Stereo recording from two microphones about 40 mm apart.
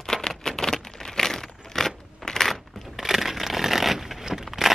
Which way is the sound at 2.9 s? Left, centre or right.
Centre.